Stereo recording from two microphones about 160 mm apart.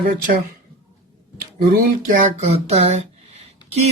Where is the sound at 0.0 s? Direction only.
60° right (ahead or behind).